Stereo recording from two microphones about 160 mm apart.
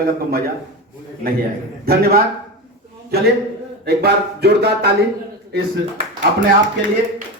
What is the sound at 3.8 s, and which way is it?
Speech, 90° right.